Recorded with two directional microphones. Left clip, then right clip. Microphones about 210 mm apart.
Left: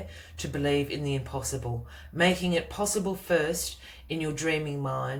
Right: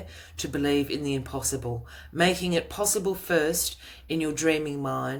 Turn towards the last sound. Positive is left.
turn(degrees=-50)  # may be behind; listen again after turning